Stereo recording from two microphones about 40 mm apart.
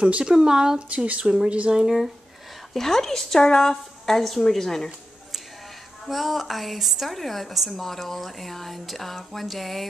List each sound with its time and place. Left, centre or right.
0.2 s speech: centre
0.8 s speech: right
1.2 s speech: right
2.7 s a woman's voice: centre
6.0 s speech: centre